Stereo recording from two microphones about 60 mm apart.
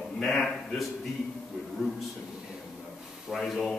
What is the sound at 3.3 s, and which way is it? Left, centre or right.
Speech, centre.